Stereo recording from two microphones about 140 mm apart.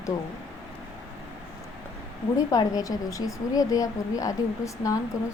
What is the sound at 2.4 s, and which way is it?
Speech, 25° left (ahead or behind).